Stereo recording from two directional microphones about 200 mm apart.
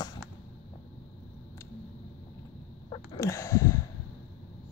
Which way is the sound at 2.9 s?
15° left (ahead or behind).